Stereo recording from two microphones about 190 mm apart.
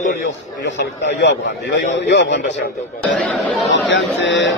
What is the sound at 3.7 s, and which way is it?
Speech, 75° left (ahead or behind).